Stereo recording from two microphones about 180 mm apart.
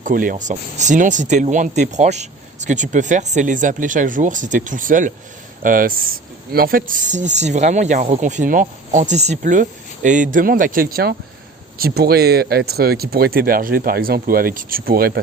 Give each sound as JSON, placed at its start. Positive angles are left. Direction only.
{"t": 0.0, "sound": "speech", "side_deg": -50}